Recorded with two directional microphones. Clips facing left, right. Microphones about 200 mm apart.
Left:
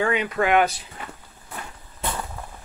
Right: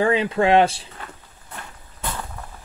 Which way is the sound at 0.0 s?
30° right (ahead or behind).